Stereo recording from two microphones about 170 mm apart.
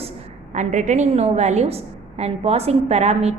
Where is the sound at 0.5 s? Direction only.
45° right (ahead or behind).